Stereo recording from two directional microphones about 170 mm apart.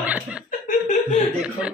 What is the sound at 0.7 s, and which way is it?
Chuckle, 45° left (ahead or behind).